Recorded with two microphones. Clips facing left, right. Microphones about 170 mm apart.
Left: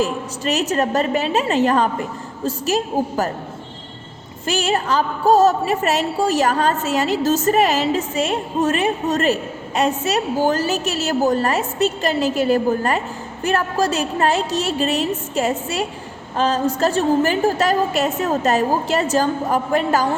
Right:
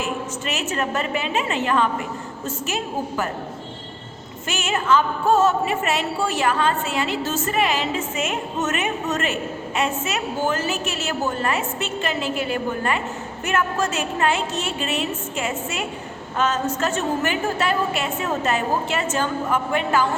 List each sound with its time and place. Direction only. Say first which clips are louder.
0.0 s music: left 5 dB; 35° left (ahead or behind)
4.4 s music: left 3 dB; 35° left (ahead or behind)